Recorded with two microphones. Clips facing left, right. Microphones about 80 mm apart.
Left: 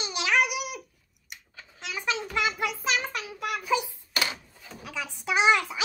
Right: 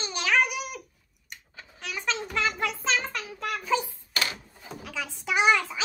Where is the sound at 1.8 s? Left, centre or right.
Centre.